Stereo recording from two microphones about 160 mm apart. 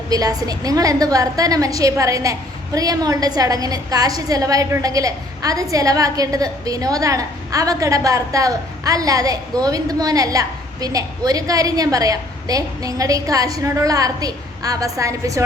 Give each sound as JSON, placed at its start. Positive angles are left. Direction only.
{"t": 0.1, "sound": "a woman's voice", "side_deg": -20}